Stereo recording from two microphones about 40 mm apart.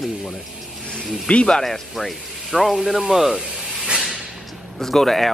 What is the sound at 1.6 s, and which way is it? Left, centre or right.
Speech, centre.